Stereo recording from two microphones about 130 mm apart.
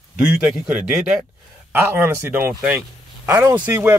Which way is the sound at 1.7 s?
15° right (ahead or behind).